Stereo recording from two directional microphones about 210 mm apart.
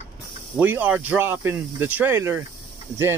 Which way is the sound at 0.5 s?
10° right (ahead or behind).